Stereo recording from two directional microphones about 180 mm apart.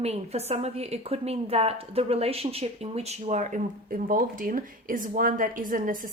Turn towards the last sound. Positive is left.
turn(degrees=-50)  # may be behind; listen again after turning